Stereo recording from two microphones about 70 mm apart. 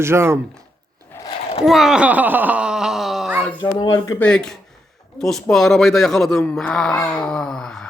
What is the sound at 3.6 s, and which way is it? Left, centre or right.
Speech, left.